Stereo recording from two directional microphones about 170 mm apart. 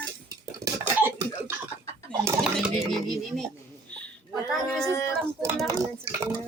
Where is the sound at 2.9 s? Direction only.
Centre (ahead or behind).